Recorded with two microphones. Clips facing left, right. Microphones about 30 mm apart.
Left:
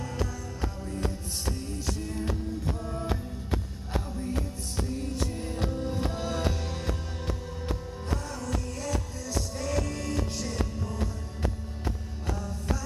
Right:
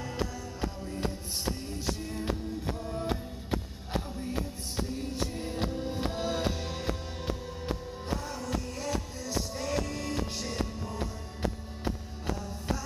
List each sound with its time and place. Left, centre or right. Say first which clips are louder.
2.0 s music: left 2 dB; centre
4.8 s music: left 3 dB; centre
8.4 s music: left 1 dB; centre